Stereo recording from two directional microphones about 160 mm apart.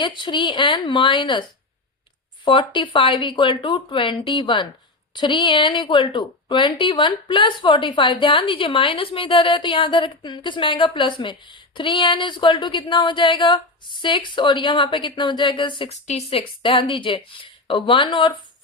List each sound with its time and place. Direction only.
0.0 s speech: 30° left (ahead or behind)
15.9 s speech: 45° left (ahead or behind)